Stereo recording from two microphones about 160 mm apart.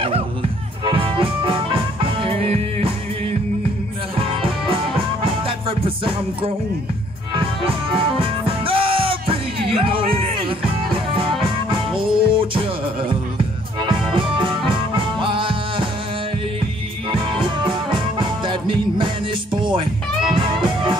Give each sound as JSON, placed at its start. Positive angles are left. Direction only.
{"t": 0.0, "sound": "music", "side_deg": -35}
{"t": 4.2, "sound": "music", "side_deg": -35}
{"t": 14.1, "sound": "music", "side_deg": -35}
{"t": 17.1, "sound": "music", "side_deg": -30}